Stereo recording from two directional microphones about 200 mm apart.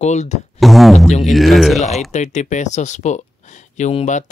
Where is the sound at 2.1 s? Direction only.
35° left (ahead or behind).